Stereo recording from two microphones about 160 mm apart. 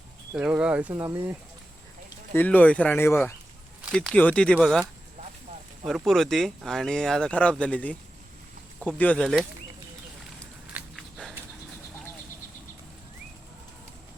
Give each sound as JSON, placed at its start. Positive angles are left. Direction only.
{"t": 0.3, "sound": "speech", "side_deg": -5}
{"t": 0.9, "sound": "speech", "side_deg": -20}
{"t": 2.3, "sound": "speech", "side_deg": 10}
{"t": 9.0, "sound": "speech", "side_deg": 5}
{"t": 10.7, "sound": "walk", "side_deg": -10}